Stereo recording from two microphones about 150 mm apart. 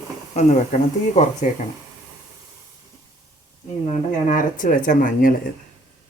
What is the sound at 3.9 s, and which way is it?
Speech, 60° left (ahead or behind).